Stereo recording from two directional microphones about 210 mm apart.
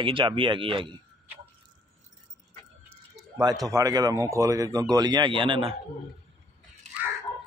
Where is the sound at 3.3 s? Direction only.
15° right (ahead or behind).